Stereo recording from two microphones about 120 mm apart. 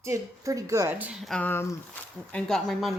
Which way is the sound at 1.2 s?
5° left (ahead or behind).